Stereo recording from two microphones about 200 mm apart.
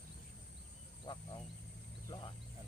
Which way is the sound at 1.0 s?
20° left (ahead or behind).